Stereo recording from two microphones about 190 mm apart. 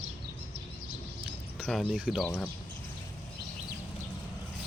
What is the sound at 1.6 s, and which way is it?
Speech, centre (ahead or behind).